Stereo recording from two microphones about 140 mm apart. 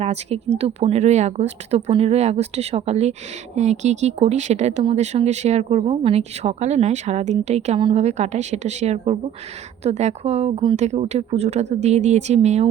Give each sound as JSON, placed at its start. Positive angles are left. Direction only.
{"t": 0.0, "sound": "a woman's voice", "side_deg": -50}